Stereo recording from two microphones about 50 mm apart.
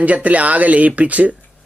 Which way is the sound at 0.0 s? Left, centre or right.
Right.